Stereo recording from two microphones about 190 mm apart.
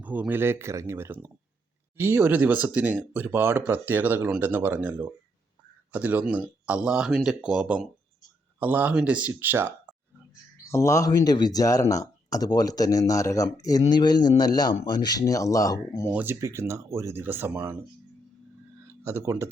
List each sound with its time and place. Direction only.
0.0 s speech: 10° right (ahead or behind)
10.7 s speech: 15° left (ahead or behind)
16.1 s speech: 10° right (ahead or behind)
19.0 s speech: 15° right (ahead or behind)